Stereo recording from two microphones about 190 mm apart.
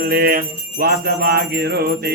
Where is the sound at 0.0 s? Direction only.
55° right (ahead or behind).